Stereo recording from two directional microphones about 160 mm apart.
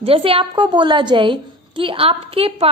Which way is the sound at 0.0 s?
35° right (ahead or behind).